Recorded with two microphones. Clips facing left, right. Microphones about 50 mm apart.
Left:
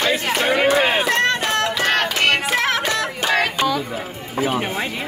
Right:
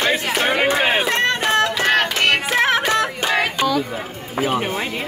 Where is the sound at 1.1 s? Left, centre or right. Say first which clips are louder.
Left 1 dB; right.